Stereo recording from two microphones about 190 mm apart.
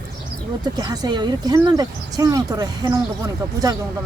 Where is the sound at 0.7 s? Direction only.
20° right (ahead or behind).